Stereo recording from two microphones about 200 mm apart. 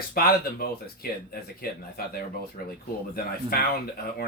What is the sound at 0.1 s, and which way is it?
Speech, 50° left (ahead or behind).